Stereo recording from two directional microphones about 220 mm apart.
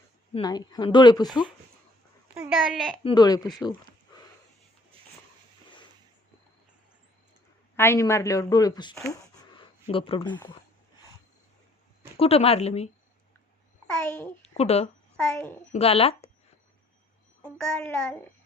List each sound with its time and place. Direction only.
0.3 s speech: 20° left (ahead or behind)
2.3 s a child's voice: 10° right (ahead or behind)
3.0 s speech: 20° left (ahead or behind)
7.8 s speech: 10° left (ahead or behind)
9.0 s a sound: 20° left (ahead or behind)
12.1 s speech: 25° left (ahead or behind)
14.4 s speech: 30° left (ahead or behind)
15.1 s a child's voice: 5° left (ahead or behind)
15.7 s speech: 25° left (ahead or behind)
17.6 s a child's voice: 5° left (ahead or behind)